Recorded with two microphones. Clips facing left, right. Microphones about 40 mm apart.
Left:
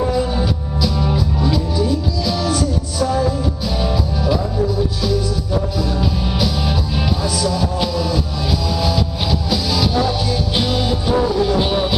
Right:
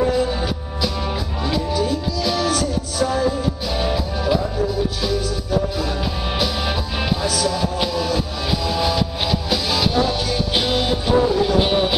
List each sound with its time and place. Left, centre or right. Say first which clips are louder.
0.4 s music: left 3 dB; centre
5.8 s music: left 3 dB; centre